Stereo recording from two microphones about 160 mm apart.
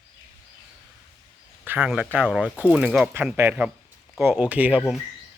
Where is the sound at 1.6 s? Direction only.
10° right (ahead or behind).